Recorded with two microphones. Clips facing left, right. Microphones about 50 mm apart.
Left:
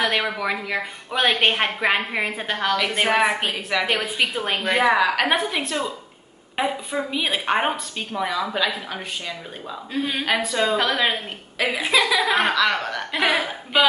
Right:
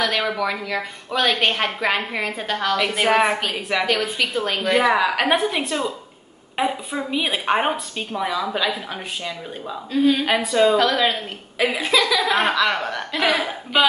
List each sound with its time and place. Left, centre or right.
0.3 s a woman's voice: centre
2.8 s a woman's voice: centre
3.8 s a woman's voice: left; by 8.7 s centre
9.9 s a woman's voice: centre
10.2 s a woman's voice: centre
10.9 s a woman's voice: centre
11.5 s speech: centre
11.8 s a woman's voice: centre
12.3 s a woman's voice: centre
13.1 s a woman's voice: centre